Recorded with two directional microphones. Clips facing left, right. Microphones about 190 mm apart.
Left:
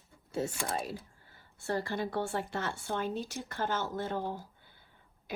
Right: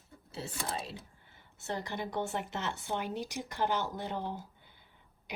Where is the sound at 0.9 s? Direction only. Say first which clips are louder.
Left 5 dB; 25° right (ahead or behind).